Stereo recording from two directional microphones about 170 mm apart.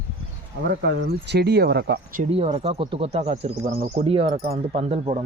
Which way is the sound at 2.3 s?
35° right (ahead or behind).